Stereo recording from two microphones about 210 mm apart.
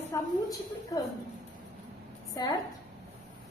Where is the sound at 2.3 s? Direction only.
20° left (ahead or behind).